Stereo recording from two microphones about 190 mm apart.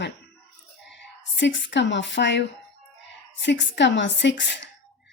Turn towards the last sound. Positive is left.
turn(degrees=70)  # may be behind; listen again after turning